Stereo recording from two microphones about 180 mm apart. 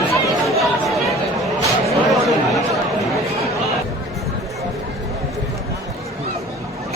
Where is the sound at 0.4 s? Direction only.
Centre (ahead or behind).